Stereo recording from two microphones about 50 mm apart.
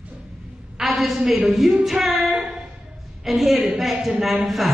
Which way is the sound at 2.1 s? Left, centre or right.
Centre.